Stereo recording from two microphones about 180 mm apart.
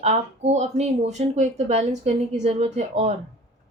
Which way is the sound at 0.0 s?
40° right (ahead or behind).